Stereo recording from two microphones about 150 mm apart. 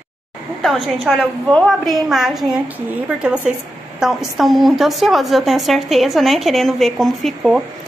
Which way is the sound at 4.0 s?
Centre (ahead or behind).